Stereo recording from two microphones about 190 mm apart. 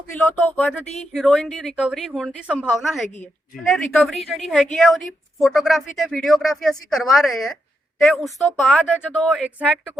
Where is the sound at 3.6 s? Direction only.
Centre (ahead or behind).